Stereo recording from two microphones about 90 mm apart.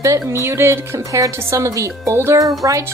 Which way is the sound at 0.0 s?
35° right (ahead or behind).